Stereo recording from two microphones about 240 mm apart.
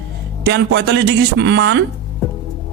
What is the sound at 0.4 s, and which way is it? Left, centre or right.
Speech, right.